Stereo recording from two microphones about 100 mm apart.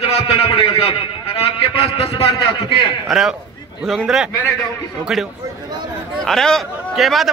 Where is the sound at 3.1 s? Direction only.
5° right (ahead or behind).